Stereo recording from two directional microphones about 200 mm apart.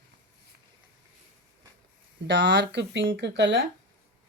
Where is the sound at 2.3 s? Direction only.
60° right (ahead or behind).